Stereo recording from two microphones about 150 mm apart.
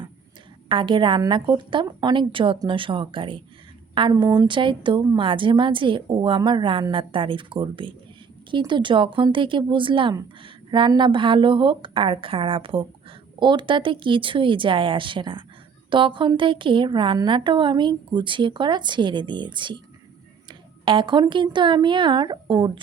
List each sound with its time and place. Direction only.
0.7 s speech: 35° right (ahead or behind)